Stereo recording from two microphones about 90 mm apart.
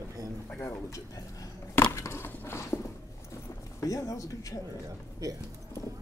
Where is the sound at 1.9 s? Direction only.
30° left (ahead or behind).